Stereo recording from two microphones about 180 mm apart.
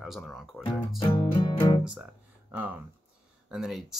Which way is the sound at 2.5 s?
10° right (ahead or behind).